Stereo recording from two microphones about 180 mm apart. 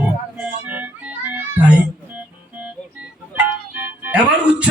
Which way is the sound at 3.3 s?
10° right (ahead or behind).